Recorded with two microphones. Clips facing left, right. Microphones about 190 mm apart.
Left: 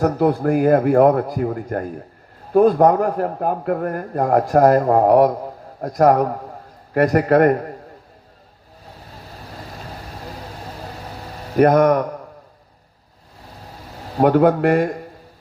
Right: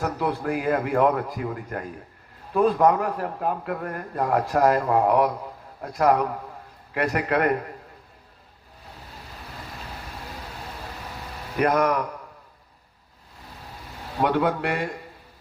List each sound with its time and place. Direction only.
0.0 s a man's voice: 40° left (ahead or behind)
9.7 s vehicle: 40° left (ahead or behind)
10.8 s hum: 40° left (ahead or behind)
14.2 s a man's voice: 40° left (ahead or behind)